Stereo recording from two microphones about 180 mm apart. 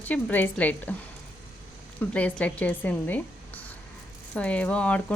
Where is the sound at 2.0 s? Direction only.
10° left (ahead or behind).